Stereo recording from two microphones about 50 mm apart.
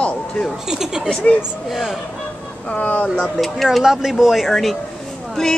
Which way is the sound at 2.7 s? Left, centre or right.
Left.